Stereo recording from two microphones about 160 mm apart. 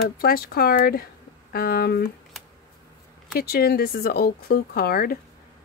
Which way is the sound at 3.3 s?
75° left (ahead or behind).